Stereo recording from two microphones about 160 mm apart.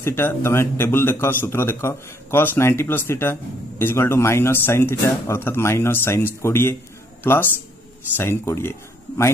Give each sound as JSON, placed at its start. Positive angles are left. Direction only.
{"t": 0.0, "sound": "a man's voice", "side_deg": 15}
{"t": 8.2, "sound": "a man's voice", "side_deg": 15}